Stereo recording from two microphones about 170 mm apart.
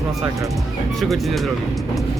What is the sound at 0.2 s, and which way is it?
Speech, 20° right (ahead or behind).